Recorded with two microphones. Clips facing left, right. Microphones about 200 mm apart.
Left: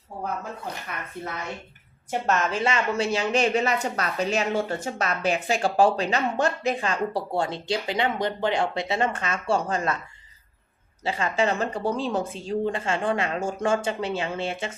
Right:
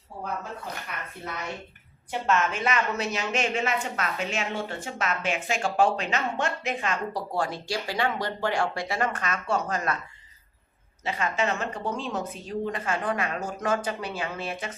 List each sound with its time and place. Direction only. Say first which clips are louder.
2.0 s a woman's voice: left 1 dB; 40° left (ahead or behind)
11.0 s speech: left 3 dB; 30° left (ahead or behind)